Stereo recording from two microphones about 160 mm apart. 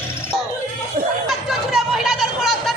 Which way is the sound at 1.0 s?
65° right (ahead or behind).